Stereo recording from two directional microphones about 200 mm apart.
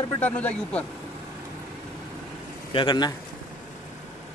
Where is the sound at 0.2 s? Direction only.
5° left (ahead or behind).